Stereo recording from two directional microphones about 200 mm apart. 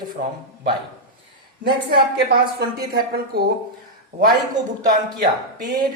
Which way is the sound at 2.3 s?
50° right (ahead or behind).